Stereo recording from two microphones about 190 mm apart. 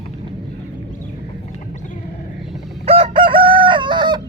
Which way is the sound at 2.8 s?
30° right (ahead or behind).